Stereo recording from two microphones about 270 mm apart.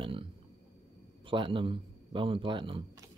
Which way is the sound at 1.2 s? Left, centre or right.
Centre.